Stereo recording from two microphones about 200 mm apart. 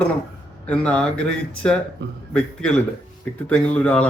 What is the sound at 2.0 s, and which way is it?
Speech, 60° right (ahead or behind).